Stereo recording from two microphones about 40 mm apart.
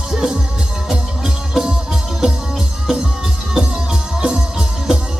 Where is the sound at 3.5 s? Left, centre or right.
Right.